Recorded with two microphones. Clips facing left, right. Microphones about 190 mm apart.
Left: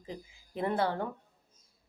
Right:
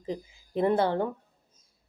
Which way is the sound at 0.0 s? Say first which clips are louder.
Right 8 dB; 25° right (ahead or behind).